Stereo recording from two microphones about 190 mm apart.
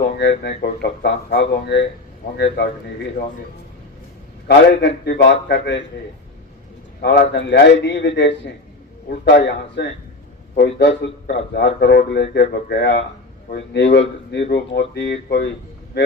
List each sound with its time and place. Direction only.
0.2 s speech: 65° left (ahead or behind)
4.4 s speech: 65° left (ahead or behind)
7.0 s speech: 60° left (ahead or behind)